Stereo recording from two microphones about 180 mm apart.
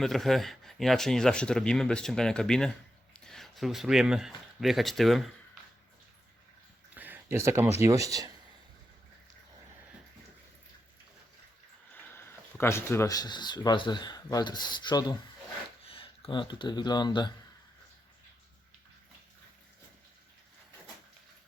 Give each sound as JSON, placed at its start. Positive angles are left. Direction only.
{"t": 0.0, "sound": "speech", "side_deg": 0}
{"t": 6.9, "sound": "speech", "side_deg": -10}
{"t": 11.9, "sound": "speech", "side_deg": 10}